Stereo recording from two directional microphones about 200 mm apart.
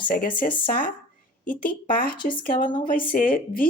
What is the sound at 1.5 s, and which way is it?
Speech, 45° left (ahead or behind).